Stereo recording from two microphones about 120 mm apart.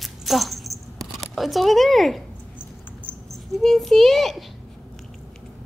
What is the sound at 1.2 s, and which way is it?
Speech, centre (ahead or behind).